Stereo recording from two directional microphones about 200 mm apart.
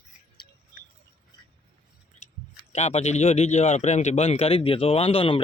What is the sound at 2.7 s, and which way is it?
A man's voice, 35° left (ahead or behind).